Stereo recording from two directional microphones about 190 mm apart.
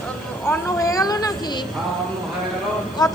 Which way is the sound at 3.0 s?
20° left (ahead or behind).